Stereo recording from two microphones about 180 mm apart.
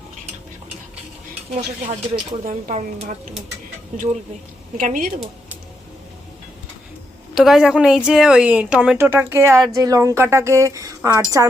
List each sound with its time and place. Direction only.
1.8 s speech: 35° right (ahead or behind)
7.3 s a woman's voice: 5° right (ahead or behind); by 11.2 s 20° right (ahead or behind)